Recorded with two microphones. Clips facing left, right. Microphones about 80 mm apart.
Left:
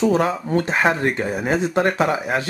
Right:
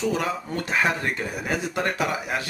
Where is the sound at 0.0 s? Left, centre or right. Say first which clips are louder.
Left 7 dB; left.